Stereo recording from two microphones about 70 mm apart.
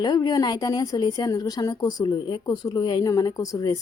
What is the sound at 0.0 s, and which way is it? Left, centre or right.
A woman's voice, left.